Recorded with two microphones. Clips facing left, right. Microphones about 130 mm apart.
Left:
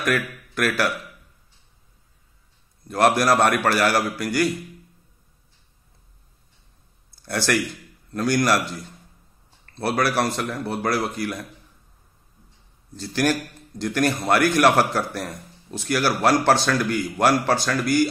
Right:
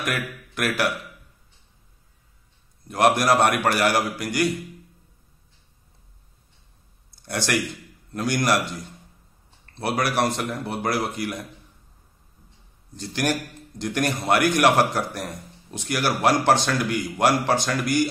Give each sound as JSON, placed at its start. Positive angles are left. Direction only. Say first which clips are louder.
{"t": 0.0, "sound": "speech", "louder": "left 4 dB", "side_deg": -20}
{"t": 2.9, "sound": "a man's voice", "louder": "left 1 dB", "side_deg": -20}
{"t": 7.2, "sound": "a man's voice", "louder": "left 2 dB", "side_deg": -20}
{"t": 9.8, "sound": "a man's voice", "louder": "left 1 dB", "side_deg": -20}
{"t": 12.9, "sound": "a man's voice", "louder": "left 3 dB", "side_deg": -20}